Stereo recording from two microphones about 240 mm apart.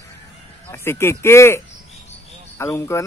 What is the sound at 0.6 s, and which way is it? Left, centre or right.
Speech, centre.